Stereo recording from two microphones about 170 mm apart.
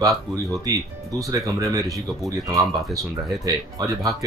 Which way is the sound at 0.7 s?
20° right (ahead or behind).